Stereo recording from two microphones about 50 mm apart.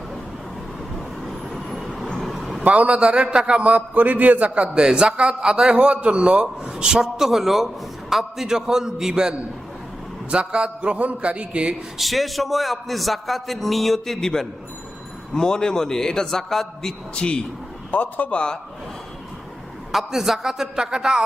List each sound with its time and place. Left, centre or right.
0.9 s vehicle: centre
2.6 s a man's voice: right
4.7 s a man's voice: centre
10.3 s a man's voice: right
11.9 s a man's voice: centre
17.2 s a man's voice: centre
17.9 s speech: left
18.3 s a man's voice: centre
19.9 s a man's voice: centre